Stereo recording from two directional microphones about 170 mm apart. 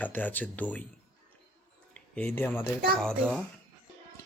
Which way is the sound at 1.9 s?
10° left (ahead or behind).